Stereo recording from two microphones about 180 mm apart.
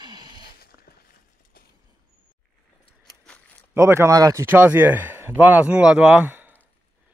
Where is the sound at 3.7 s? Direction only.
15° right (ahead or behind).